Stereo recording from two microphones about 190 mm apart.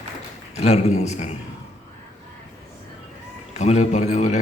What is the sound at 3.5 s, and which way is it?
Speech, 35° left (ahead or behind).